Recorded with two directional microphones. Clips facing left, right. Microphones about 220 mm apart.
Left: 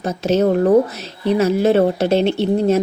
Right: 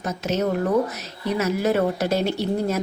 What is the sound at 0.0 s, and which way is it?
Speech, 30° left (ahead or behind).